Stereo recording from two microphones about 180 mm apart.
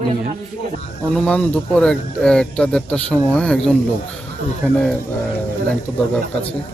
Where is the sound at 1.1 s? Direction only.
5° left (ahead or behind).